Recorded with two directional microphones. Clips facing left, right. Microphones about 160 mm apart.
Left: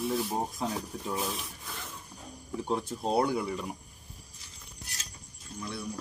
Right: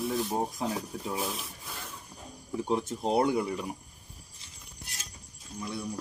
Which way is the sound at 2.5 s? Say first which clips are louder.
Right 2 dB; 15° right (ahead or behind).